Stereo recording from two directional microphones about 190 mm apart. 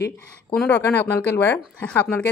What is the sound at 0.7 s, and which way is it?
Speech, 10° left (ahead or behind).